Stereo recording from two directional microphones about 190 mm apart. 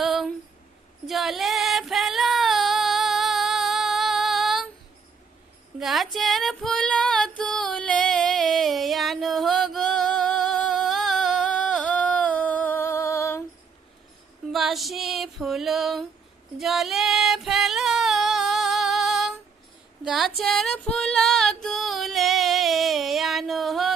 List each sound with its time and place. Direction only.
0.0 s a sound: centre (ahead or behind)
1.0 s female singing: centre (ahead or behind)
5.8 s female singing: centre (ahead or behind)
14.5 s female singing: centre (ahead or behind)